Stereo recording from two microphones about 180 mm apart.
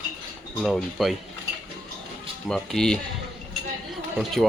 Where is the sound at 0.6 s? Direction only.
Centre (ahead or behind).